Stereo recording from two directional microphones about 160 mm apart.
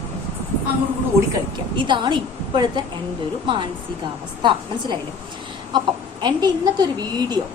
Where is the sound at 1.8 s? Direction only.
30° right (ahead or behind).